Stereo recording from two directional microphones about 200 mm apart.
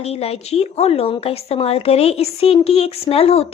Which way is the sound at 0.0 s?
30° left (ahead or behind).